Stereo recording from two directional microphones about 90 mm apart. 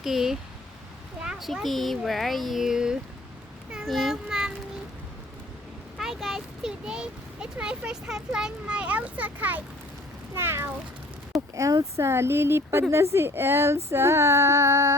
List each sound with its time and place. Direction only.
0.0 s speech: 5° right (ahead or behind)
1.2 s a sound: 5° right (ahead or behind)
1.6 s speech: centre (ahead or behind)
3.7 s child singing: 5° right (ahead or behind)
6.0 s speech: centre (ahead or behind); by 10.7 s 25° right (ahead or behind)
11.3 s speech: 40° right (ahead or behind)